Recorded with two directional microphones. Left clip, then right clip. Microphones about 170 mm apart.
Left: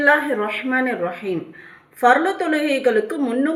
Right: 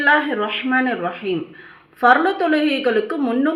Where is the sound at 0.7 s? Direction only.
15° right (ahead or behind).